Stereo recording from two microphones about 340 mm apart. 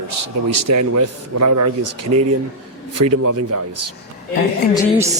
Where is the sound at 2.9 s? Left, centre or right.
Right.